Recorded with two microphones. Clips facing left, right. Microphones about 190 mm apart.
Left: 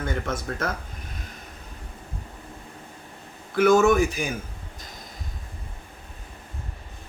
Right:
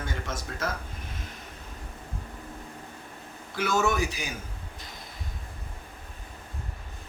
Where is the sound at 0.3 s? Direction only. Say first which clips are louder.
Left 6 dB; 55° left (ahead or behind).